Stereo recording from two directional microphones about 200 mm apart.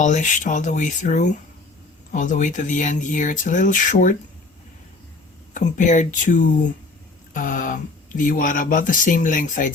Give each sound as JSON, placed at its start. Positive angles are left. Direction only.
{"t": 0.0, "sound": "speech", "side_deg": 40}
{"t": 5.5, "sound": "speech", "side_deg": 40}